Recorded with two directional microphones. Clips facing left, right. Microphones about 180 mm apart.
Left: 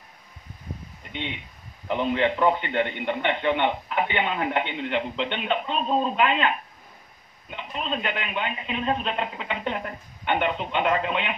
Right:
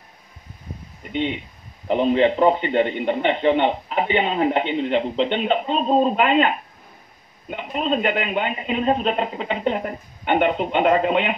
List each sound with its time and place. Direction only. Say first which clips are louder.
1.1 s a man's voice: right 10 dB; 35° right (ahead or behind)